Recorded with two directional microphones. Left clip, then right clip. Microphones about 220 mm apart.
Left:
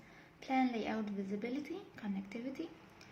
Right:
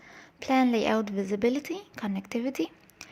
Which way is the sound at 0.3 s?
45° right (ahead or behind).